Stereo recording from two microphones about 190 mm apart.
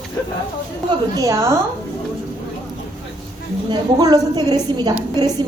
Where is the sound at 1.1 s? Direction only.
15° right (ahead or behind).